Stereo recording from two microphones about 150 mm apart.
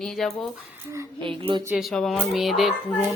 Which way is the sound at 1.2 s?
35° right (ahead or behind).